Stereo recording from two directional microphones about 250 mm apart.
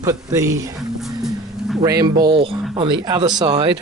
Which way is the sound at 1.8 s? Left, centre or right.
Centre.